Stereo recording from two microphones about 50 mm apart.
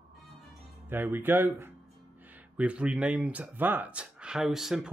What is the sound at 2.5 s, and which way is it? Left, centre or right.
Speech, right.